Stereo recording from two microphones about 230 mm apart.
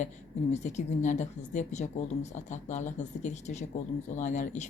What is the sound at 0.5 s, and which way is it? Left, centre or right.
Speech, left.